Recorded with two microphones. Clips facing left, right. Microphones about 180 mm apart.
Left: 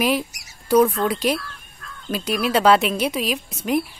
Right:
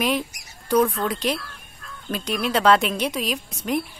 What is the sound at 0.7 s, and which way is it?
A woman's voice, 10° left (ahead or behind).